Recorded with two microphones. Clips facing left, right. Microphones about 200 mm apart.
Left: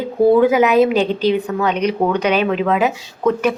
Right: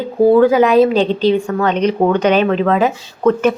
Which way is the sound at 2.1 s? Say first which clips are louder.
Right 3 dB; 5° left (ahead or behind).